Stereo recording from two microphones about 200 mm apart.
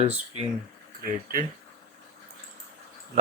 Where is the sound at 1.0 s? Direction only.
45° right (ahead or behind).